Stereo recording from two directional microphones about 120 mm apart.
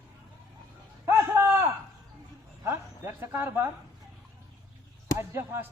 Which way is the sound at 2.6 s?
20° right (ahead or behind).